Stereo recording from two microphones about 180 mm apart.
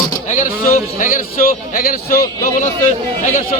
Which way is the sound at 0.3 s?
45° left (ahead or behind).